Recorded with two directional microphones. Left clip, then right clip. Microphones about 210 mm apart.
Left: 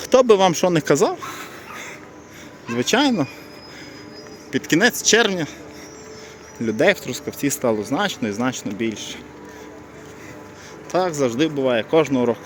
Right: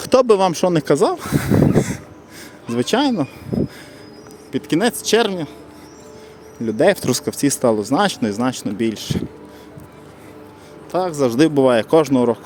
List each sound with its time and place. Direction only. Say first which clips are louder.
0.0 s speech: even; 20° right (ahead or behind)
1.1 s speech: right 10 dB; 30° right (ahead or behind)
2.6 s speech: right 1 dB; 15° right (ahead or behind)
4.5 s speech: left 1 dB; 10° right (ahead or behind)
6.7 s speech: right 2 dB; 15° right (ahead or behind)
7.0 s speech: right 6 dB; 30° right (ahead or behind)
10.9 s speech: even; 10° right (ahead or behind)
11.2 s speech: right 5 dB; 30° right (ahead or behind)